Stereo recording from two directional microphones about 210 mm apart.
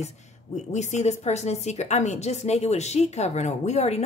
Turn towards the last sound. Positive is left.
turn(degrees=30)  # may be behind; listen again after turning